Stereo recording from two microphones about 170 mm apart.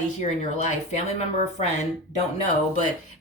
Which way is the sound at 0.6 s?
40° left (ahead or behind).